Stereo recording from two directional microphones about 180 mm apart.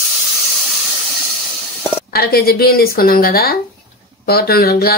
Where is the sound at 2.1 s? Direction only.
60° left (ahead or behind).